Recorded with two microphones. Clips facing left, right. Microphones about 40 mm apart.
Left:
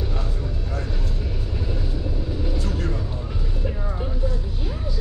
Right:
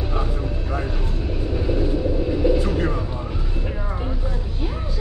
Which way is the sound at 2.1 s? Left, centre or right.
Right.